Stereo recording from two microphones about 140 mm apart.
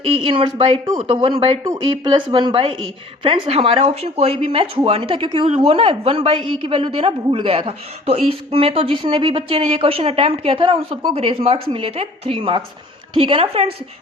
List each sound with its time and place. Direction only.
0.0 s a woman's voice: 40° right (ahead or behind)